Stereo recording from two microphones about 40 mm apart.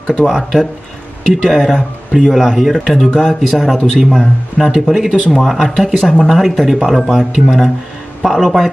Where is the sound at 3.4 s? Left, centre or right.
Centre.